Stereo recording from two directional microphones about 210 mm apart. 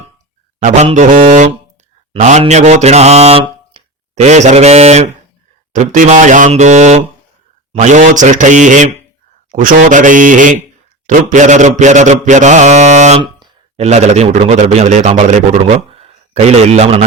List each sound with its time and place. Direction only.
0.6 s mantra: 35° right (ahead or behind)
16.0 s speech: 30° right (ahead or behind)